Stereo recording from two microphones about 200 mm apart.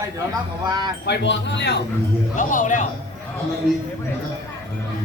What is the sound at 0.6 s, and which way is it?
Speech, 20° right (ahead or behind).